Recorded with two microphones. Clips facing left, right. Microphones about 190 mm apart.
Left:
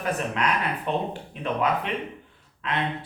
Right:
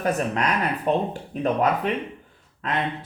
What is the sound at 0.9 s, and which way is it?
Speech, 40° right (ahead or behind).